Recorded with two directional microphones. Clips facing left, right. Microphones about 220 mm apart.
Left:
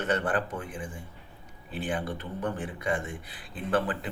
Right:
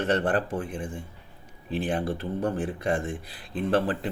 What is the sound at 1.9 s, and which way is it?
Speech, 35° right (ahead or behind).